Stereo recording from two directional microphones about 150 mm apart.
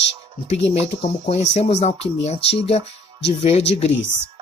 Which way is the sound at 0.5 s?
45° left (ahead or behind).